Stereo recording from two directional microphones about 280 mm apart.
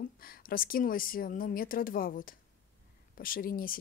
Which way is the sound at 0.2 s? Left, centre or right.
Left.